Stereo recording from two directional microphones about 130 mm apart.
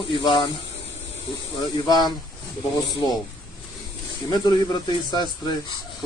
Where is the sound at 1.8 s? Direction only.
30° left (ahead or behind).